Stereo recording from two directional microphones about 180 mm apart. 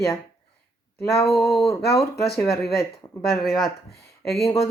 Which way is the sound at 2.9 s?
15° left (ahead or behind).